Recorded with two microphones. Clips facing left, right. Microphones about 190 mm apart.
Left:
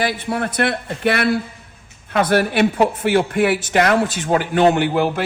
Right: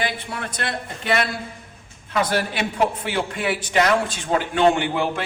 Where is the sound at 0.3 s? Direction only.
60° left (ahead or behind).